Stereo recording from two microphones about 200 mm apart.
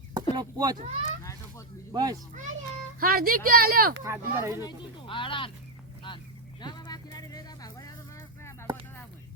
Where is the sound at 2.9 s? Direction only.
45° right (ahead or behind).